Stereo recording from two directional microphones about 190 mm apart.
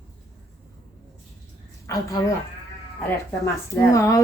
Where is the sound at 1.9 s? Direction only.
15° left (ahead or behind).